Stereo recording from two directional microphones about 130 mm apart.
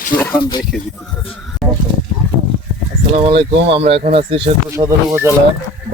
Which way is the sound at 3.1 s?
50° right (ahead or behind).